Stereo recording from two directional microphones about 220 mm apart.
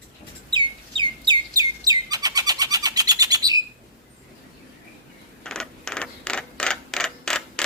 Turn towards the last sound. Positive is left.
turn(degrees=5)  # may be behind; listen again after turning